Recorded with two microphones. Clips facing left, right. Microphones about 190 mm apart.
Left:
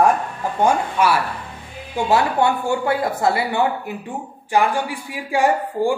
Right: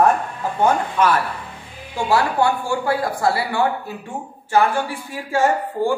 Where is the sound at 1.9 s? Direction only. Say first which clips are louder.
Left 1 dB; 20° left (ahead or behind).